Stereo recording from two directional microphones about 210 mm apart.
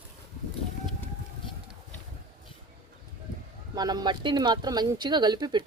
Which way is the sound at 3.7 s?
20° right (ahead or behind).